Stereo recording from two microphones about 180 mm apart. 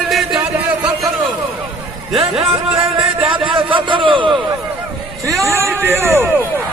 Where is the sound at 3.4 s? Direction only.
30° right (ahead or behind).